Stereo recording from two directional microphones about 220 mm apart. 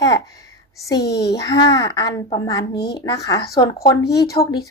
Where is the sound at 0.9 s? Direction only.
50° left (ahead or behind).